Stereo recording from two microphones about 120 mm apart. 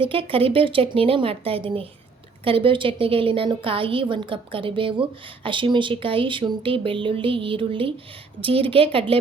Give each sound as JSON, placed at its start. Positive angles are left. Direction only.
{"t": 0.0, "sound": "a woman's voice", "side_deg": -50}